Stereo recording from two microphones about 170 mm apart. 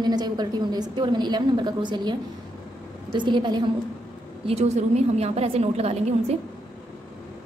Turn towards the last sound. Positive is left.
turn(degrees=-40)  # may be behind; listen again after turning